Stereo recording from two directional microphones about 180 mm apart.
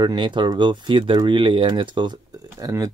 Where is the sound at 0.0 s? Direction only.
25° right (ahead or behind).